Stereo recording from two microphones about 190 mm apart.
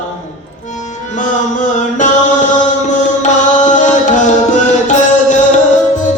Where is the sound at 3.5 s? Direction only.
40° left (ahead or behind).